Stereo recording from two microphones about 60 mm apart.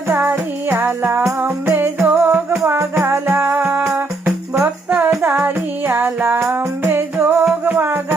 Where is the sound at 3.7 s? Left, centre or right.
Right.